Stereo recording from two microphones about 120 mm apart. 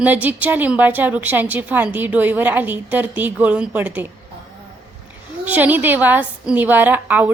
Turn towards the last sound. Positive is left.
turn(degrees=-15)  # may be behind; listen again after turning